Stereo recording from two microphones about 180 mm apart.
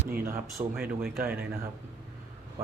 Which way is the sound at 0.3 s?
15° right (ahead or behind).